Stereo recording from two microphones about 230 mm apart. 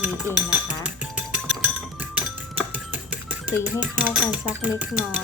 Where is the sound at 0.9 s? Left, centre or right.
Centre.